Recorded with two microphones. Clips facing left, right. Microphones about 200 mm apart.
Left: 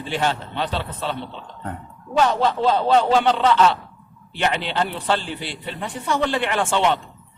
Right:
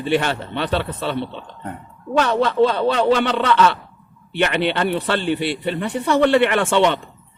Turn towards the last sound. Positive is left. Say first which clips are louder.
# right 3 dB
turn(degrees=-65)  # may be behind; listen again after turning